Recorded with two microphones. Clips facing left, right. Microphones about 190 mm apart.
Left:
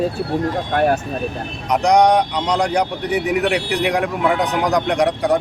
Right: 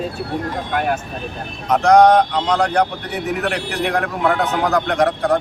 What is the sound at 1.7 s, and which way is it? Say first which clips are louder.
Speech: right 2 dB; 15° left (ahead or behind).